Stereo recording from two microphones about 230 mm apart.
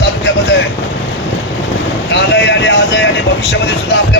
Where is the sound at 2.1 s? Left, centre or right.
Left.